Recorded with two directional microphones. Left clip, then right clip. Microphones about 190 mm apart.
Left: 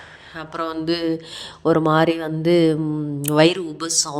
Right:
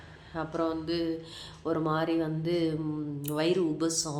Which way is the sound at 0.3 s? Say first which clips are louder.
Left 5 dB; 40° left (ahead or behind).